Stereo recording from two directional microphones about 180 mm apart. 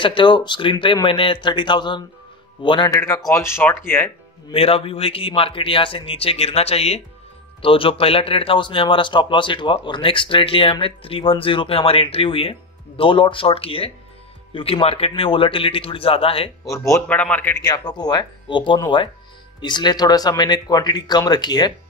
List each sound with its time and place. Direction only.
0.0 s speech: 25° left (ahead or behind)
3.3 s a man's voice: 15° left (ahead or behind)
4.5 s speech: 30° left (ahead or behind)
16.6 s a man's voice: 15° left (ahead or behind)
17.6 s speech: 25° left (ahead or behind)